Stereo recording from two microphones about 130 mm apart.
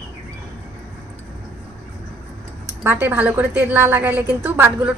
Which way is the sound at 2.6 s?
20° right (ahead or behind).